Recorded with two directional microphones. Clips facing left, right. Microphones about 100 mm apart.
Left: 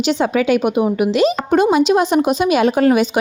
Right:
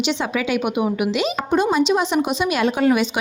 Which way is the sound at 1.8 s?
50° left (ahead or behind).